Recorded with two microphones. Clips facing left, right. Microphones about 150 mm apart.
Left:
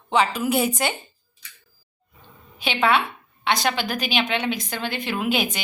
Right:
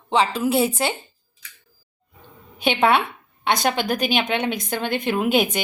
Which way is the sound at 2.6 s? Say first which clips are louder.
Right 3 dB; 50° right (ahead or behind).